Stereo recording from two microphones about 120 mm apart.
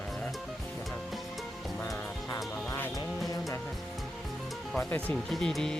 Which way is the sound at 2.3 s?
25° left (ahead or behind).